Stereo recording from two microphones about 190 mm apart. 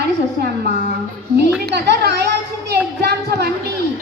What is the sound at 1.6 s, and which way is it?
A woman's voice, 60° right (ahead or behind).